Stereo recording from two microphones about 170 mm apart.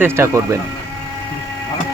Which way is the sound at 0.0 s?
15° right (ahead or behind).